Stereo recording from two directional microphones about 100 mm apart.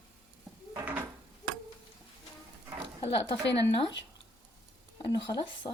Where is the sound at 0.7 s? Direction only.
15° right (ahead or behind).